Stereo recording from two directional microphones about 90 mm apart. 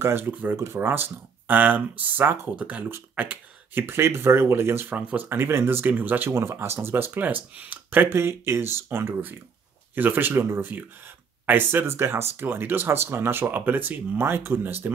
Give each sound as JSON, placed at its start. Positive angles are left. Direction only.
{"t": 0.0, "sound": "speech", "side_deg": -25}